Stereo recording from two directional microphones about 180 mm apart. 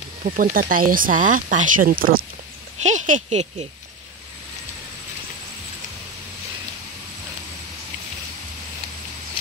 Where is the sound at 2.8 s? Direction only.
40° right (ahead or behind).